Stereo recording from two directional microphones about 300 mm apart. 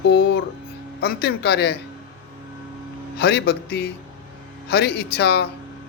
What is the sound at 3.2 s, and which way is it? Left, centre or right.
Speech, left.